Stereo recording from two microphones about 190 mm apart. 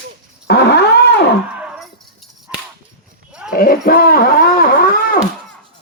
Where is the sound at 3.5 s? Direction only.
50° left (ahead or behind).